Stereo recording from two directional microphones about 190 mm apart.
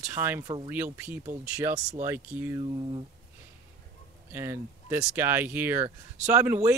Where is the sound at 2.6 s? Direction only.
25° right (ahead or behind).